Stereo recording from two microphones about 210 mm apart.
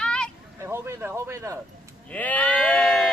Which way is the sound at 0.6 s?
10° right (ahead or behind).